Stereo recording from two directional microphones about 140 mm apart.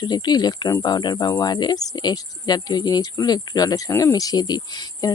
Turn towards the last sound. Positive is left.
turn(degrees=30)  # may be behind; listen again after turning